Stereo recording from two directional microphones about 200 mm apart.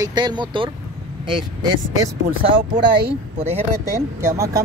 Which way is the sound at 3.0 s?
30° right (ahead or behind).